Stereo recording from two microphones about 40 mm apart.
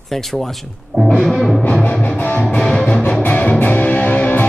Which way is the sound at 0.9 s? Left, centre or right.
Centre.